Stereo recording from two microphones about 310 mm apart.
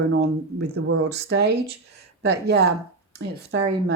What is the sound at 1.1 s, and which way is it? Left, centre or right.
Speech, right.